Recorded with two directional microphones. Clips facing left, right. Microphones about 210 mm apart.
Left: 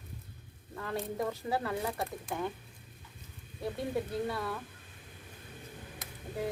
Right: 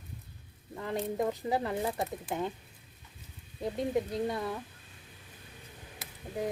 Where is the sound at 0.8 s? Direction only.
20° right (ahead or behind).